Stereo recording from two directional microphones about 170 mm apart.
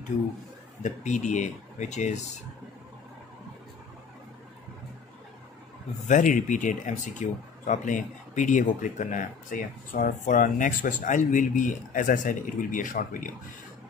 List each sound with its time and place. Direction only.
0.8 s speech: 45° left (ahead or behind)
6.0 s speech: 50° left (ahead or behind)